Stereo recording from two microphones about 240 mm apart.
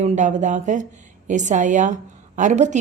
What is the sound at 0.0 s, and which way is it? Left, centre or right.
A woman's voice, right.